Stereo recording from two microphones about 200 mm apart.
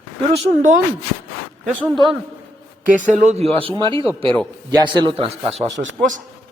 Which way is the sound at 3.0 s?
35° right (ahead or behind).